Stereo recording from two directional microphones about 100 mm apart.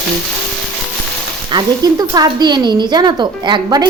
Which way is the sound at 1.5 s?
40° right (ahead or behind).